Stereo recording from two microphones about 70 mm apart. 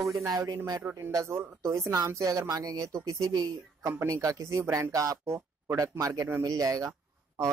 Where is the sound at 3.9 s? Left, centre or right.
Right.